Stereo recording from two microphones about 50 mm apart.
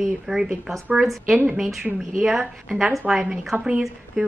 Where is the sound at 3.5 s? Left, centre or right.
Right.